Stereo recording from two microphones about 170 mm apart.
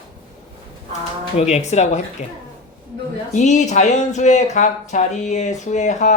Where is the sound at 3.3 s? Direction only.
45° left (ahead or behind).